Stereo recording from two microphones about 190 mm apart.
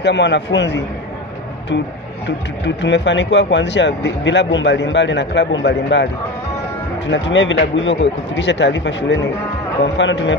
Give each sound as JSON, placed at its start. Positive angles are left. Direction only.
{"t": 0.0, "sound": "speech", "side_deg": 65}
{"t": 2.2, "sound": "speech", "side_deg": 70}
{"t": 7.1, "sound": "speech", "side_deg": 75}